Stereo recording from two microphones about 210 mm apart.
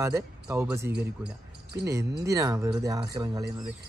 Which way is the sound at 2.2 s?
15° right (ahead or behind).